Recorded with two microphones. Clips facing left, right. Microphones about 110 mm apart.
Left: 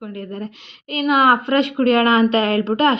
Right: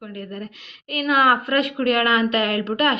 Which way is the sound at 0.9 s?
25° left (ahead or behind).